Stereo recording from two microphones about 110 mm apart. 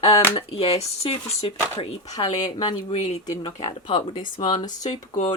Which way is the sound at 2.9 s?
90° left.